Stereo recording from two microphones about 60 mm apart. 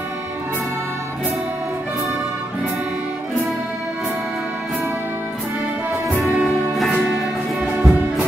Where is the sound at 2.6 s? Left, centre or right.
Centre.